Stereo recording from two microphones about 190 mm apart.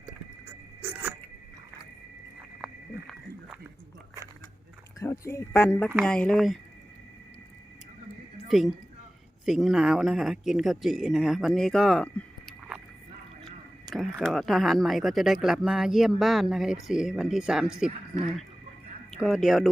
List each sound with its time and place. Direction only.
4.9 s speech: 15° left (ahead or behind)
5.9 s speech: centre (ahead or behind)
8.4 s a woman's voice: centre (ahead or behind)